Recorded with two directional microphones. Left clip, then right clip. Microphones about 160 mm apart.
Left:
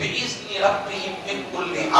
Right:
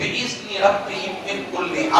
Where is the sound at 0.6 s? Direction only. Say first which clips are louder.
Right 3 dB; 15° right (ahead or behind).